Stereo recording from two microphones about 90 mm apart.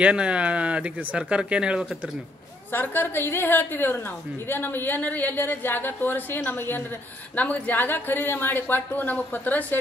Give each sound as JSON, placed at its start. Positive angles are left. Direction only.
{"t": 0.0, "sound": "speech", "side_deg": -10}
{"t": 2.7, "sound": "a woman's voice", "side_deg": 20}